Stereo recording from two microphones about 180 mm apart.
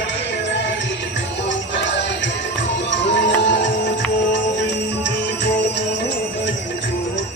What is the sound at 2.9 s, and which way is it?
Music, 75° left (ahead or behind).